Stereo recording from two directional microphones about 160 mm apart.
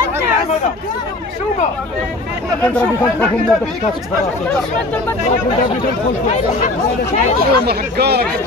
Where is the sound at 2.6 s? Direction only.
10° left (ahead or behind).